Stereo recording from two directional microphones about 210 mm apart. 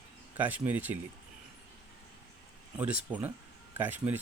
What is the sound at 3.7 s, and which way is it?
Speech, 10° right (ahead or behind).